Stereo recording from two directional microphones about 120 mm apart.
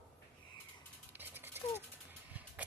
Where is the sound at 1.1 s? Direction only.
15° right (ahead or behind).